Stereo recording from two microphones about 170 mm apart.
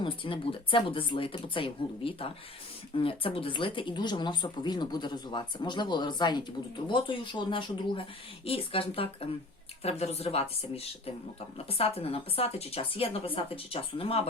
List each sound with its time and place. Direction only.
0.0 s speech: 30° left (ahead or behind)